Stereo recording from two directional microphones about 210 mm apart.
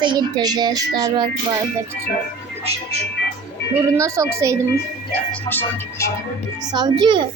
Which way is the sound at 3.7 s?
15° right (ahead or behind).